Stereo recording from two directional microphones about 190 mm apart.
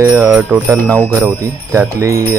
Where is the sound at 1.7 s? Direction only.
15° right (ahead or behind).